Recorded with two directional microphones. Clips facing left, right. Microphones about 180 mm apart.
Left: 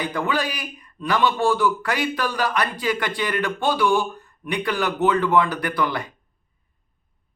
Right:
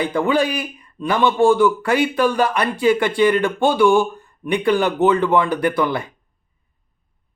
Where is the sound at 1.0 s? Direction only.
25° right (ahead or behind).